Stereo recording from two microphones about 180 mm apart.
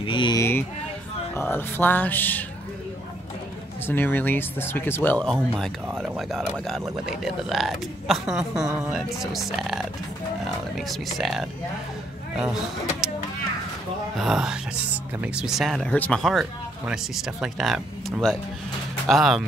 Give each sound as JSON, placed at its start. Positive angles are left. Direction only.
{"t": 0.0, "sound": "a sound", "side_deg": 25}
{"t": 1.3, "sound": "speech", "side_deg": 10}
{"t": 3.8, "sound": "speech", "side_deg": 10}
{"t": 5.9, "sound": "speech", "side_deg": -5}
{"t": 14.1, "sound": "speech", "side_deg": 0}